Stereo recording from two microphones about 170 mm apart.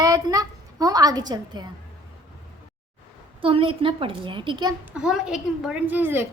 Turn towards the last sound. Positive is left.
turn(degrees=-10)  # may be behind; listen again after turning